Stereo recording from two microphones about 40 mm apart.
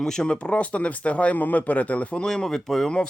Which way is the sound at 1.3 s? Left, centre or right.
Left.